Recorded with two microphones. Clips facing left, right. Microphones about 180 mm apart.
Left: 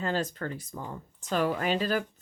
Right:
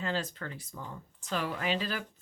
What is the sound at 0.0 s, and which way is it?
Speech, 45° left (ahead or behind).